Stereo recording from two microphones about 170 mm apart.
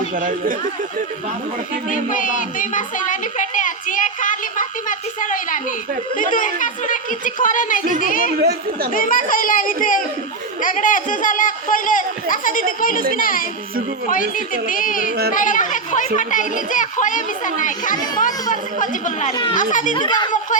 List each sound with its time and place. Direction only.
0.2 s speech: 50° right (ahead or behind)
1.9 s speech: 50° left (ahead or behind)
8.4 s speech: 70° right (ahead or behind)
8.9 s speech: 55° left (ahead or behind)
19.3 s speech: 25° left (ahead or behind)
19.5 s speech: 50° left (ahead or behind)
20.0 s speech: 25° left (ahead or behind)